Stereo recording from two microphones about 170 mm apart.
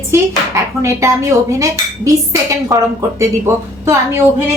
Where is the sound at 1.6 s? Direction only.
20° right (ahead or behind).